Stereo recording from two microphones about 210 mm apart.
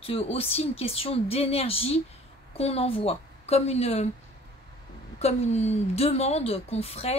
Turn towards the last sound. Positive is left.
turn(degrees=30)  # may be behind; listen again after turning